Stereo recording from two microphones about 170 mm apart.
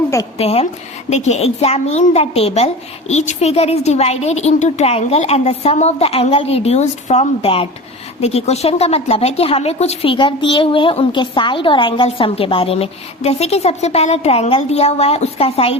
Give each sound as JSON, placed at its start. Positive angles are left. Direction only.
{"t": 0.3, "sound": "a woman's voice", "side_deg": 35}